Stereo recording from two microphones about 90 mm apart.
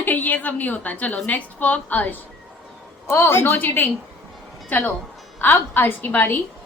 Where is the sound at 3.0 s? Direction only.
25° left (ahead or behind).